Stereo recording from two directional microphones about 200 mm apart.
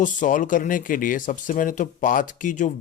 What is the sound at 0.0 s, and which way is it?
Speech, 40° left (ahead or behind).